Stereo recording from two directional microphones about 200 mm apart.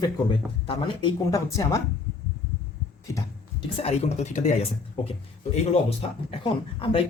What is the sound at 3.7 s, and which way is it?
Speech, 30° left (ahead or behind).